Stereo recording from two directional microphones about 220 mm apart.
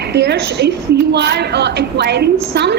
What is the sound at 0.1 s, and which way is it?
A woman's voice, 50° right (ahead or behind).